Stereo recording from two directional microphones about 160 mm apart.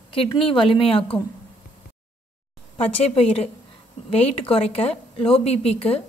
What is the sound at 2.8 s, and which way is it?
A woman's voice, 40° left (ahead or behind).